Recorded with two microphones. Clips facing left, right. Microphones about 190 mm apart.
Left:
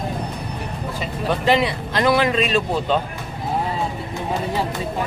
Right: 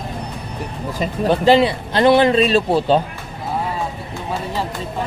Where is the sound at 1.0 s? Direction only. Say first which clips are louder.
Right 6 dB; 35° right (ahead or behind).